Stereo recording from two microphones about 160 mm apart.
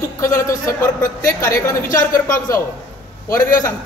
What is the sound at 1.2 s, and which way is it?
A woman's voice, 20° left (ahead or behind).